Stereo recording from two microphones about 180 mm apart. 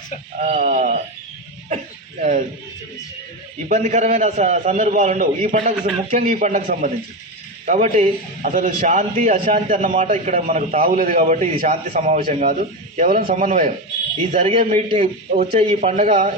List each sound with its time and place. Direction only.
0.3 s a man's voice: 40° right (ahead or behind)
3.7 s a man's voice: 40° right (ahead or behind)